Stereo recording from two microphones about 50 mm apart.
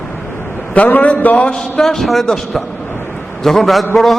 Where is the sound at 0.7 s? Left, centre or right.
Left.